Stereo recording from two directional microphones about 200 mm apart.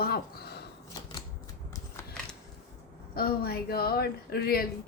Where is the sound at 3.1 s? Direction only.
50° left (ahead or behind).